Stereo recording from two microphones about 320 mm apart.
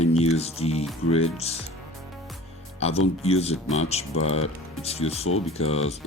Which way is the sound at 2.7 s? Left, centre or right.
Centre.